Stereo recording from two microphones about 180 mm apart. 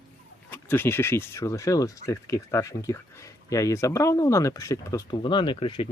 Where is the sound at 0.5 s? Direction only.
10° left (ahead or behind).